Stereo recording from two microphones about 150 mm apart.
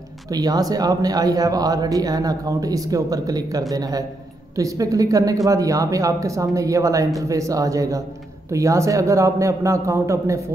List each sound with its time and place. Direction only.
0.3 s a man's voice: 25° right (ahead or behind)